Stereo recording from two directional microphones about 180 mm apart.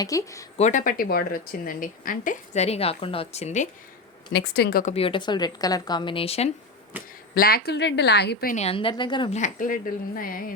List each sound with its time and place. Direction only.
0.0 s a woman's voice: 20° left (ahead or behind)
0.5 s speech: 40° left (ahead or behind)
4.3 s speech: 65° left (ahead or behind)
4.9 s speech: 30° left (ahead or behind)
7.3 s a woman's voice: 60° left (ahead or behind)
8.5 s speech: 35° left (ahead or behind)
9.3 s speech: 45° left (ahead or behind)